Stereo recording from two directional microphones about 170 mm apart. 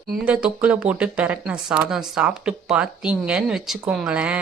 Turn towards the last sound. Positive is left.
turn(degrees=-5)  # may be behind; listen again after turning